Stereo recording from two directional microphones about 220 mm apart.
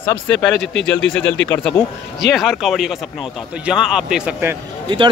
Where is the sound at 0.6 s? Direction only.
55° left (ahead or behind).